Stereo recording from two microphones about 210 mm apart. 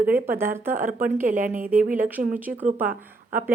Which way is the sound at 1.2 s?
40° right (ahead or behind).